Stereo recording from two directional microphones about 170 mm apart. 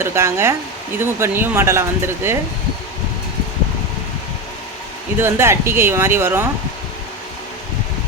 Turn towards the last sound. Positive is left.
turn(degrees=-15)  # may be behind; listen again after turning